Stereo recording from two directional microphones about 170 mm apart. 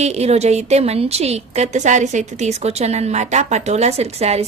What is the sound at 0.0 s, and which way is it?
A woman's voice, 40° right (ahead or behind).